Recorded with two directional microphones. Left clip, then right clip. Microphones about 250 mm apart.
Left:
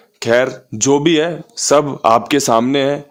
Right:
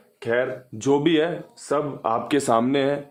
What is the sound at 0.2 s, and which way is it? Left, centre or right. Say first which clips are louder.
Speech: left 9 dB; left.